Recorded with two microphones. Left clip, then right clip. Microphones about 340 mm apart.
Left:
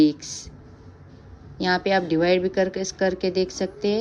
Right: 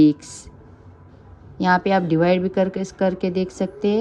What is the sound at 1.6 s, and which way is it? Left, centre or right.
A woman's voice, centre.